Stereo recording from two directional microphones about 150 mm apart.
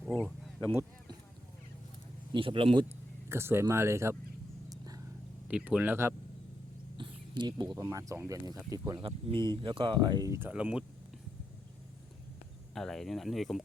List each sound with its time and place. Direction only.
2.3 s speech: 35° right (ahead or behind)
3.2 s speech: 15° right (ahead or behind)
4.7 s vehicle: 25° right (ahead or behind)
5.5 s speech: 10° right (ahead or behind)
6.9 s speech: 30° right (ahead or behind)
9.0 s speech: 35° right (ahead or behind); by 10.5 s 20° right (ahead or behind)
10.5 s speech: 5° right (ahead or behind)
12.7 s speech: 5° left (ahead or behind)